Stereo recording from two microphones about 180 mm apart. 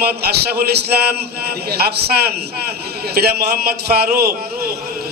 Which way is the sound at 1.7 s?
60° right (ahead or behind).